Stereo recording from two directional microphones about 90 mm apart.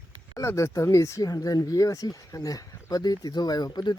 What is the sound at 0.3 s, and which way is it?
Speech, 35° left (ahead or behind).